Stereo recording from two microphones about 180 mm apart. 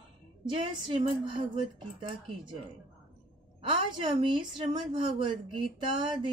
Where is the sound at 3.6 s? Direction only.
25° right (ahead or behind).